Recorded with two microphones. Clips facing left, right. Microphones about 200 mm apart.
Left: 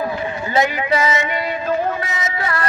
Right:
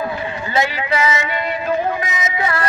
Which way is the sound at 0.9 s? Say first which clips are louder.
Even; 30° left (ahead or behind).